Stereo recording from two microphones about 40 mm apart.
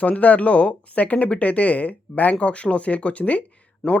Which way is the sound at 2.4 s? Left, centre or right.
Left.